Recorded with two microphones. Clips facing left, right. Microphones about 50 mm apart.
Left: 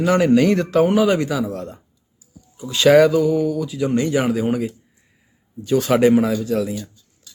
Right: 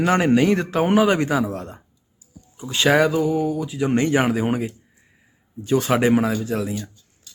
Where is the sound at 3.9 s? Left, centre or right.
Right.